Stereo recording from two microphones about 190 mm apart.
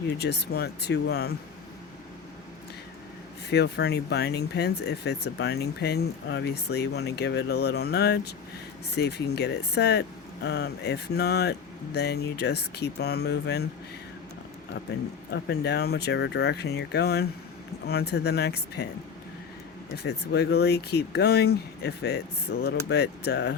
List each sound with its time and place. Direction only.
0.2 s speech: 60° left (ahead or behind)
3.5 s speech: 60° left (ahead or behind)
15.3 s speech: 60° left (ahead or behind)
20.0 s speech: 60° left (ahead or behind)